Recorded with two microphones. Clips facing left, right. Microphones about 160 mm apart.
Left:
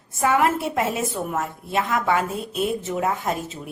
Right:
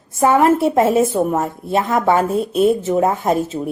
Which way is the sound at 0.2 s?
35° right (ahead or behind).